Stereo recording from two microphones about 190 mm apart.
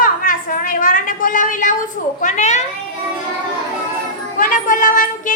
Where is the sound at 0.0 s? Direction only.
45° left (ahead or behind).